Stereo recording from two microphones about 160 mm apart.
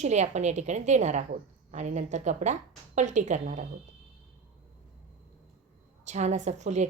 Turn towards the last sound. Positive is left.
turn(degrees=-45)  # may be behind; listen again after turning